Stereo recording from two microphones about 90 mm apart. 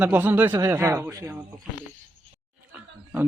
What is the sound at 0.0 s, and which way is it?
Speech, 20° right (ahead or behind).